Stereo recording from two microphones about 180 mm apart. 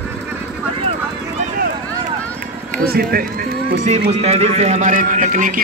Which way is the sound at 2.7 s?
55° right (ahead or behind).